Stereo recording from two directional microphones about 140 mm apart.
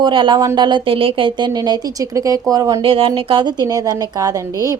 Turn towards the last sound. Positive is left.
turn(degrees=-25)  # may be behind; listen again after turning